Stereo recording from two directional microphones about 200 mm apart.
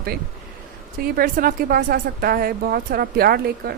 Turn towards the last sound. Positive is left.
turn(degrees=-50)  # may be behind; listen again after turning